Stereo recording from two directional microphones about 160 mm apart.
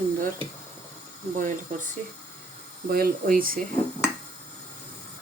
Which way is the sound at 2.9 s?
60° right (ahead or behind).